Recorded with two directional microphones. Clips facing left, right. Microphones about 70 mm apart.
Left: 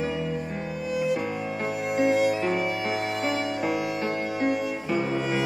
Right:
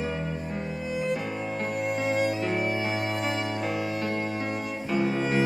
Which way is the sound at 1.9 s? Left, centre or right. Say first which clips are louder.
Left 5 dB; centre.